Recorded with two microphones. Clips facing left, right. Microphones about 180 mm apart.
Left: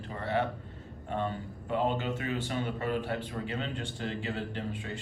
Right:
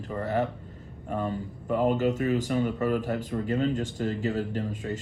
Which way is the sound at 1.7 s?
40° right (ahead or behind).